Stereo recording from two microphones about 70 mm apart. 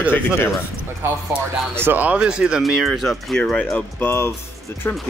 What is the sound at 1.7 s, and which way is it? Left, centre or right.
Speech, right.